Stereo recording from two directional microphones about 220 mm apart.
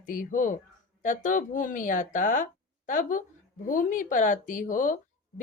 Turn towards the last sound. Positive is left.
turn(degrees=35)  # may be behind; listen again after turning